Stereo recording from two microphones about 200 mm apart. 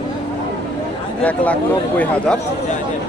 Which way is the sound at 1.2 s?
5° left (ahead or behind).